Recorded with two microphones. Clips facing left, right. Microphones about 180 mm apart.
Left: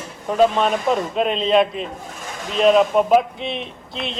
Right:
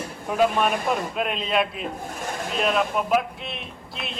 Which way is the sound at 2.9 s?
40° left (ahead or behind).